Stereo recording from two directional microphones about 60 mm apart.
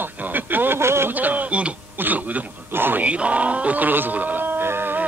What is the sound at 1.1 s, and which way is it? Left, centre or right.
A man's voice, right.